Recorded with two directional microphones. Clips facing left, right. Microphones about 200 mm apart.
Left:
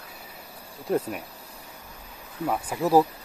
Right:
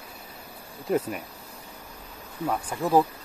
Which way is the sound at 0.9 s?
Centre (ahead or behind).